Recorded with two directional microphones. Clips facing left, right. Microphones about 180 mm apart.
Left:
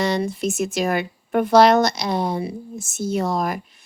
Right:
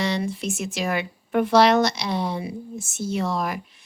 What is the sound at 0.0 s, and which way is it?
A woman's voice, 45° left (ahead or behind).